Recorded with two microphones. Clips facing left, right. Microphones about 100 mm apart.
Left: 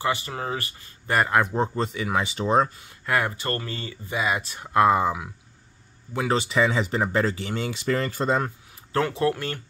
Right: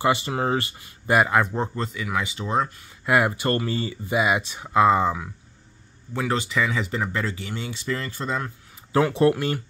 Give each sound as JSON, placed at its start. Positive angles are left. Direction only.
{"t": 0.0, "sound": "speech", "side_deg": -20}
{"t": 1.1, "sound": "speech", "side_deg": -5}
{"t": 1.4, "sound": "speech", "side_deg": 10}
{"t": 1.8, "sound": "speech", "side_deg": 20}
{"t": 3.1, "sound": "speech", "side_deg": -15}
{"t": 4.4, "sound": "speech", "side_deg": 0}
{"t": 6.1, "sound": "speech", "side_deg": 20}
{"t": 9.1, "sound": "speech", "side_deg": -20}